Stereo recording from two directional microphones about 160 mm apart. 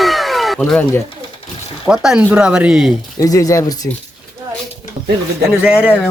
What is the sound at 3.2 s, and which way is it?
Speech, 20° left (ahead or behind).